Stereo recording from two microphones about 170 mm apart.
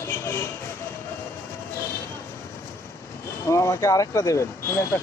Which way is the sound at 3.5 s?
15° left (ahead or behind).